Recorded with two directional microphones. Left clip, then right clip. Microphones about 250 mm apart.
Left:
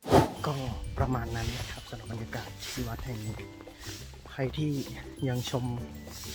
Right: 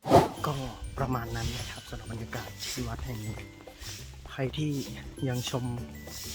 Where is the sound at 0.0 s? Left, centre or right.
Centre.